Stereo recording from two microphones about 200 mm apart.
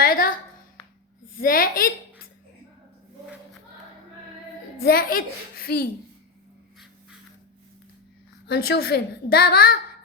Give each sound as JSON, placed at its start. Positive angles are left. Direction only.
{"t": 0.0, "sound": "a sound", "side_deg": 45}
{"t": 1.4, "sound": "a woman's voice", "side_deg": 45}
{"t": 4.8, "sound": "a child's voice", "side_deg": 50}
{"t": 8.4, "sound": "a child's voice", "side_deg": 55}